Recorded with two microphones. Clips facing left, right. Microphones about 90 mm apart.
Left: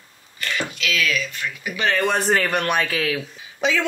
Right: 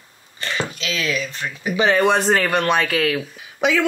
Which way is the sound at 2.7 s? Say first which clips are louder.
Right 3 dB; centre (ahead or behind).